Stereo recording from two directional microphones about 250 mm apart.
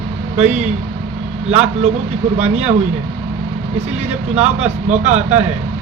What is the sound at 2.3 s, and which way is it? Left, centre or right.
Speech, right.